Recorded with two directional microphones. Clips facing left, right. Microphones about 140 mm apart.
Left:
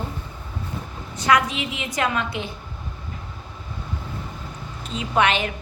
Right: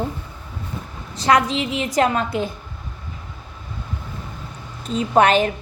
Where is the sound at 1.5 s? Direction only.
35° right (ahead or behind).